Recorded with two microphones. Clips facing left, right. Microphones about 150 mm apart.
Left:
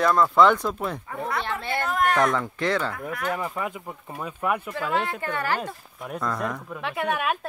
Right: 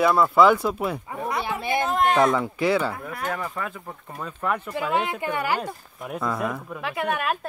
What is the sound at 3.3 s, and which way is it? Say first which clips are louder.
Speech: left 2 dB; 15° left (ahead or behind).